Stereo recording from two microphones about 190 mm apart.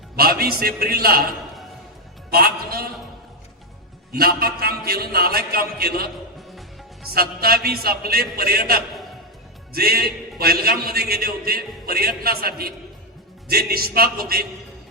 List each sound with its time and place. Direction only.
0.2 s music: 50° right (ahead or behind)
0.6 s a man's voice: 50° right (ahead or behind)
2.3 s a man's voice: 50° right (ahead or behind)
4.1 s a man's voice: 55° right (ahead or behind)
7.1 s a man's voice: 50° right (ahead or behind)